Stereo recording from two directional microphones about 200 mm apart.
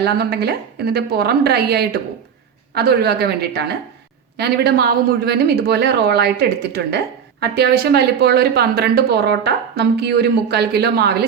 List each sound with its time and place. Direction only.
0.0 s a woman's voice: 55° right (ahead or behind)